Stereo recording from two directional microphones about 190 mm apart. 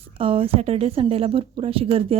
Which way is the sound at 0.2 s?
30° right (ahead or behind).